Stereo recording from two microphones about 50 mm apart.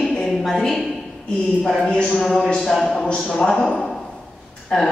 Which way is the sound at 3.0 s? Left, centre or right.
Left.